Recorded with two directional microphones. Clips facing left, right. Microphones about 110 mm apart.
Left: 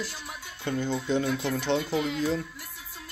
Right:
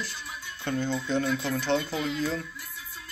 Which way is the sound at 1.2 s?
50° left (ahead or behind).